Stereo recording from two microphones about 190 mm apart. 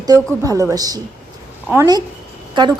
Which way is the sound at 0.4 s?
15° right (ahead or behind).